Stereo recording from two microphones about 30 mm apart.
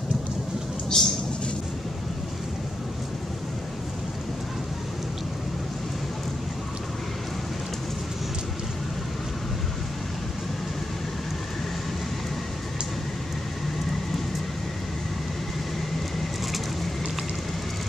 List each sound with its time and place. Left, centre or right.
0.9 s speech: left